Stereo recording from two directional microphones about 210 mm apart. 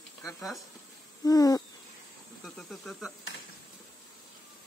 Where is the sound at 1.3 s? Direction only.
15° left (ahead or behind).